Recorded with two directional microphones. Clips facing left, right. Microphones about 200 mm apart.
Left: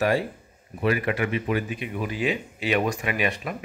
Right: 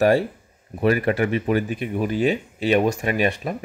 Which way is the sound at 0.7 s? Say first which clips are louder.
Right 5 dB; 40° right (ahead or behind).